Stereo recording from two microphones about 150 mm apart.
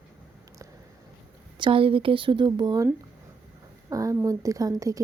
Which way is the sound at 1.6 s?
35° right (ahead or behind).